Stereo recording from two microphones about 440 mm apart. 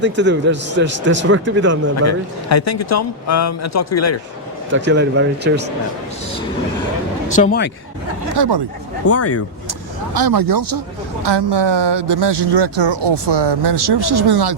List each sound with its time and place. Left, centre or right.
0.0 s a man's voice: right
2.0 s speech: left
4.7 s a man's voice: right
7.3 s speech: centre
8.4 s speech: right
9.0 s speech: left
10.2 s speech: right
11.2 s speech: right